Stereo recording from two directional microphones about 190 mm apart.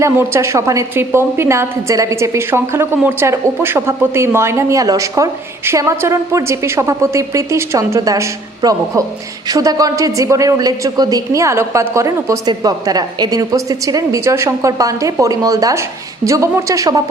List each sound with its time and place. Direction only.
0.0 s a woman's voice: 15° right (ahead or behind)